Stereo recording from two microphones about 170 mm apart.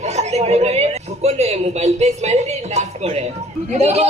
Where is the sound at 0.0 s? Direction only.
40° right (ahead or behind).